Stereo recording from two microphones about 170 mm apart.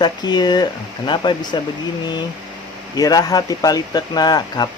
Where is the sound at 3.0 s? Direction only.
20° left (ahead or behind).